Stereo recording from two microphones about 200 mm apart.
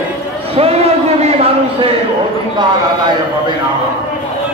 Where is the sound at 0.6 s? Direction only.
30° right (ahead or behind).